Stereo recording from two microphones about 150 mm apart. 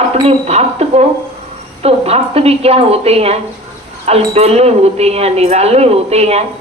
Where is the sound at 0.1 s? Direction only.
45° right (ahead or behind).